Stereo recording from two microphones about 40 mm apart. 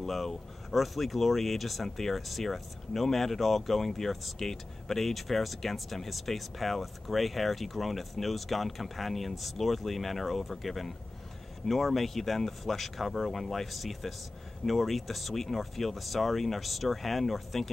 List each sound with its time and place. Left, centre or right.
0.0 s speech: centre